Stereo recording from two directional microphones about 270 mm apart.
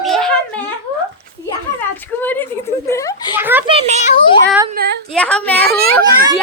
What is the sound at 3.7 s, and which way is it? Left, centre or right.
Speech, right.